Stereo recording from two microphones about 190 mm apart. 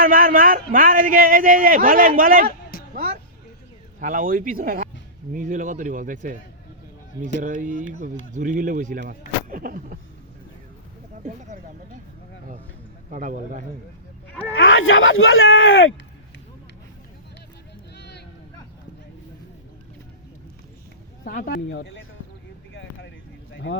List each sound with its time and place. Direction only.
0.0 s a man's voice: 50° right (ahead or behind)
2.9 s vehicle: 45° right (ahead or behind)
4.0 s speech: 45° right (ahead or behind)
7.4 s speech: 45° right (ahead or behind)
11.2 s speech: 40° right (ahead or behind)
13.1 s speech: 45° right (ahead or behind)
14.5 s speech: 90° left
21.2 s speech: 50° left (ahead or behind)
21.7 s speech: 75° left (ahead or behind)
22.7 s a sound: 70° left (ahead or behind)